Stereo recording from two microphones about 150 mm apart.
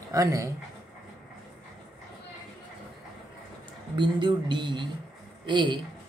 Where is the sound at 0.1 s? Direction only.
20° right (ahead or behind).